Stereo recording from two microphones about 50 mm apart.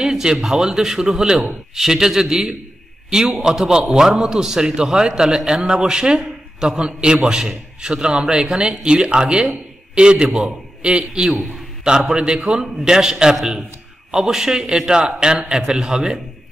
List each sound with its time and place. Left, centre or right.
0.0 s a man's voice: centre
11.2 s a man's voice: centre
11.8 s a man's voice: centre